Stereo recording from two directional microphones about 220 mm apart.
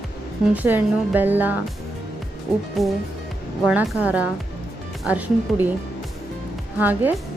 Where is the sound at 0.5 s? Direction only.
10° right (ahead or behind).